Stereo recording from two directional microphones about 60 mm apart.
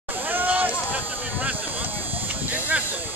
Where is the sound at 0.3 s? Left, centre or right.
Right.